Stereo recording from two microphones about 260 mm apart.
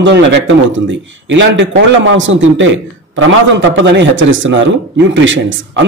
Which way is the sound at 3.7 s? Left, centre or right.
Right.